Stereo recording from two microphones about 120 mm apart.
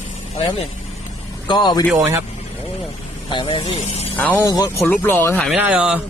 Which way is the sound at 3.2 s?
45° left (ahead or behind).